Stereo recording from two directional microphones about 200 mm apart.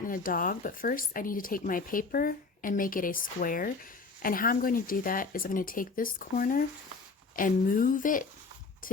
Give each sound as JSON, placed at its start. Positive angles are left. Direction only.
{"t": 0.1, "sound": "speech", "side_deg": 45}